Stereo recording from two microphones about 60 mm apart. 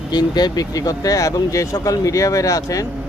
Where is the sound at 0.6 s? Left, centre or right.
Left.